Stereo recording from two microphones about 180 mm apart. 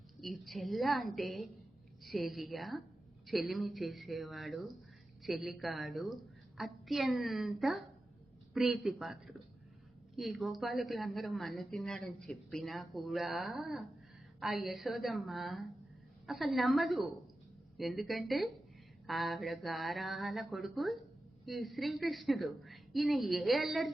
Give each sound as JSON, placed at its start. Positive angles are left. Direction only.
{"t": 0.2, "sound": "speech", "side_deg": 0}